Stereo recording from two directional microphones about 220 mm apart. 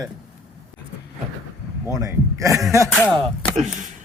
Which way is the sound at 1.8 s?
10° right (ahead or behind).